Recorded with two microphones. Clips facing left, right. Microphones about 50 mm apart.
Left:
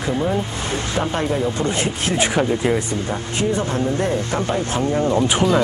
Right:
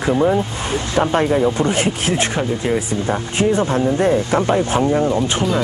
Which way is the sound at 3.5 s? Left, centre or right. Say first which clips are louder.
Right 4 dB; centre.